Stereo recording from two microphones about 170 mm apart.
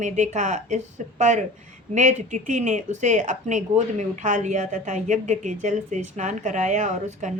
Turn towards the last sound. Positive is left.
turn(degrees=-45)  # may be behind; listen again after turning